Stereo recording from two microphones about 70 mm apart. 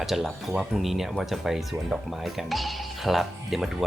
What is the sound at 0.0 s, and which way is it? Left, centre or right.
Speech, centre.